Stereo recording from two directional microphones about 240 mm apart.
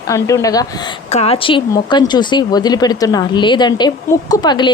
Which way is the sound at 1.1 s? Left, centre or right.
Left.